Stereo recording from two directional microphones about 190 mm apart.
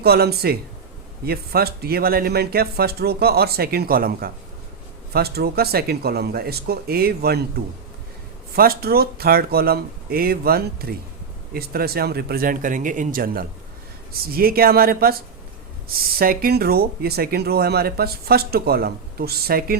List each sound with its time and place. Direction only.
0.0 s speech: 55° right (ahead or behind)
8.5 s speech: 55° right (ahead or behind)